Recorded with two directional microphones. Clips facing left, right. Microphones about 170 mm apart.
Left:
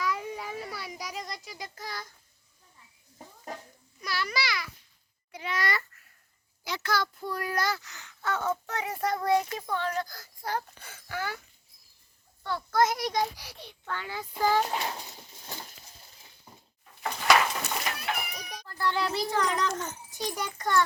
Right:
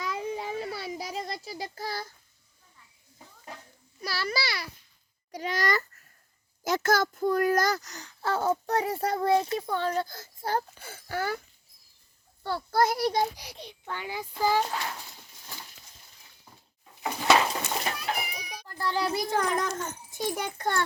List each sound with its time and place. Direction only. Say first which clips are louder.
0.0 s child singing: right 1 dB; 25° right (ahead or behind)
4.0 s a child's voice: right 1 dB; 30° right (ahead or behind)
12.4 s a child's voice: even; 30° right (ahead or behind)
13.3 s a child's voice: right 3 dB; 20° right (ahead or behind)
14.7 s a sound: left 2 dB; 25° left (ahead or behind)
16.8 s a sound: right 2 dB; 10° right (ahead or behind)
17.2 s cat: right 1 dB; 25° right (ahead or behind)
18.8 s a child's voice: even; 40° right (ahead or behind); by 20.8 s 60° right (ahead or behind)